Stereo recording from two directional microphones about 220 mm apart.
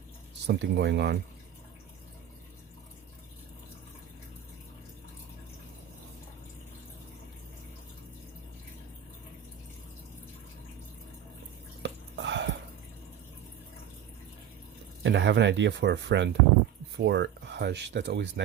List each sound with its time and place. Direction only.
0.4 s speech: 50° right (ahead or behind)
11.8 s a sound: 55° right (ahead or behind)
15.0 s speech: 55° right (ahead or behind)